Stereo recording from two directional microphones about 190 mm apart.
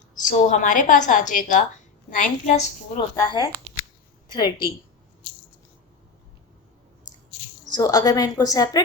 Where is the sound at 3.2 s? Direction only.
20° left (ahead or behind).